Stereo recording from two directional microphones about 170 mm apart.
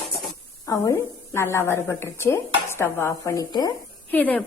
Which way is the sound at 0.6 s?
15° left (ahead or behind).